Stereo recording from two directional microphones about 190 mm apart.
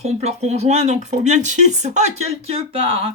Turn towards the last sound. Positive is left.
turn(degrees=-30)  # may be behind; listen again after turning